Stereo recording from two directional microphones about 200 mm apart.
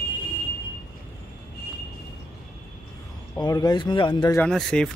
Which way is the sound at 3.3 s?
20° left (ahead or behind).